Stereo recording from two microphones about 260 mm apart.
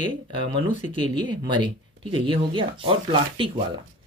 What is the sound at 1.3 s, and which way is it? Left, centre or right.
Speech, centre.